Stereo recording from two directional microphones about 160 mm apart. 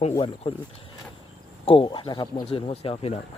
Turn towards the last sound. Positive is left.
turn(degrees=40)  # may be behind; listen again after turning